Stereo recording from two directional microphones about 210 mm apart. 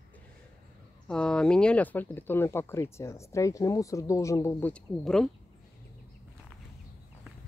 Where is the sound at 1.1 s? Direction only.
5° left (ahead or behind).